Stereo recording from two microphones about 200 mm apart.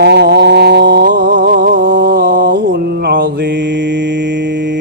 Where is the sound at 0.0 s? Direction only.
55° right (ahead or behind).